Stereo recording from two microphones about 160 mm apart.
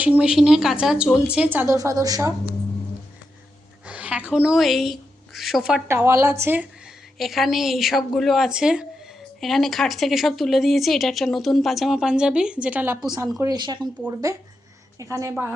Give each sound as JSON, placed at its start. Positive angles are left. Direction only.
{"t": 0.0, "sound": "speech", "side_deg": -5}
{"t": 3.8, "sound": "speech", "side_deg": -10}
{"t": 5.9, "sound": "speech", "side_deg": -15}
{"t": 7.2, "sound": "speech", "side_deg": 0}
{"t": 13.1, "sound": "a woman's voice", "side_deg": -20}